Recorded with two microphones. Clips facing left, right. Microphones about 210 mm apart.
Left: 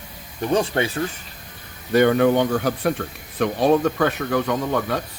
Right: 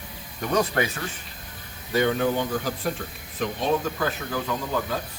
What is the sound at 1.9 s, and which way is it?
Speech, 65° left (ahead or behind).